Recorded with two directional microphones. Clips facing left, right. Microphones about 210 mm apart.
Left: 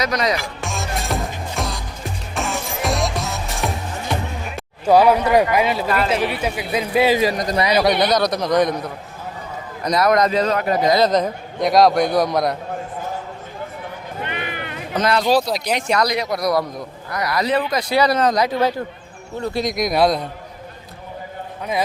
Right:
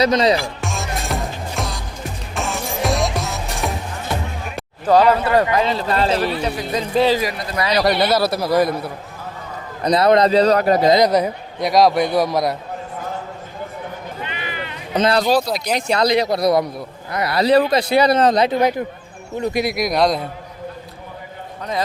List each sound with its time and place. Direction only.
0.0 s speech: 30° right (ahead or behind)
0.6 s music: centre (ahead or behind)
4.9 s a man's voice: 10° left (ahead or behind); by 8.9 s 5° right (ahead or behind)
9.8 s a man's voice: 30° right (ahead or behind)
10.9 s a man's voice: 10° right (ahead or behind)
14.2 s a sound: 55° left (ahead or behind)
14.9 s speech: 25° right (ahead or behind)
15.4 s a man's voice: centre (ahead or behind)
15.7 s speech: 30° right (ahead or behind)
19.4 s speech: 15° right (ahead or behind)
19.7 s a man's voice: centre (ahead or behind)